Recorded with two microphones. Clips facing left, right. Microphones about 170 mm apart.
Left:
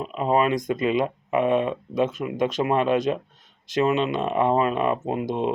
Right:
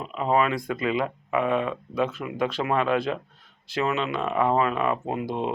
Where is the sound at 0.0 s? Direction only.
20° left (ahead or behind).